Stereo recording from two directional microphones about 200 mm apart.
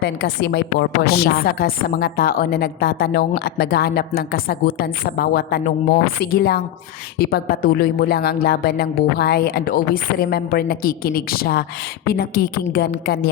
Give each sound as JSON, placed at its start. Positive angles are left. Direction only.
{"t": 0.0, "sound": "a woman's voice", "side_deg": 55}